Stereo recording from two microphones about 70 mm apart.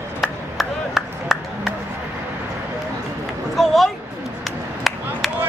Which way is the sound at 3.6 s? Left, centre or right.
Centre.